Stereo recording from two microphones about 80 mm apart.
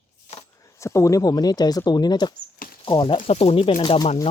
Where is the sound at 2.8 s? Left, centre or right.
Left.